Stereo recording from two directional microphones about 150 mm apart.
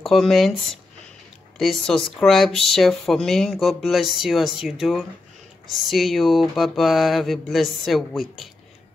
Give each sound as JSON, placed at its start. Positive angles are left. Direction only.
{"t": 0.0, "sound": "speech", "side_deg": 0}
{"t": 1.6, "sound": "speech", "side_deg": 5}